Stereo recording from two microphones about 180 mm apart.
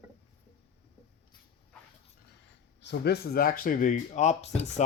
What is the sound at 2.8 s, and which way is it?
Speech, 70° left (ahead or behind).